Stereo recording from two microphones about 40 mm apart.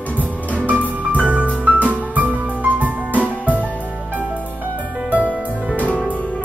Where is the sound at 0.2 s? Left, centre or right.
Right.